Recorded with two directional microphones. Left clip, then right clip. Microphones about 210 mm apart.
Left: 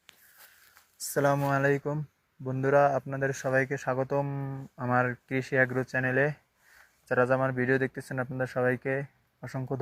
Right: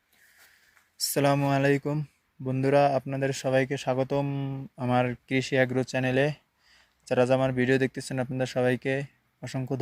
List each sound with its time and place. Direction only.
1.2 s speech: 50° right (ahead or behind)
3.8 s speech: 35° right (ahead or behind)